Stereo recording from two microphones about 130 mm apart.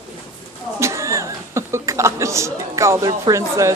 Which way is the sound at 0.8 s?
20° right (ahead or behind).